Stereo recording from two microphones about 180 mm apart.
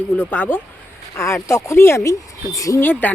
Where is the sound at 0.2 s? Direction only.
10° left (ahead or behind).